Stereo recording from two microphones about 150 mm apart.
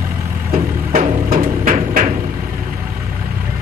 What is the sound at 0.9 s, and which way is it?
Music, 75° right (ahead or behind).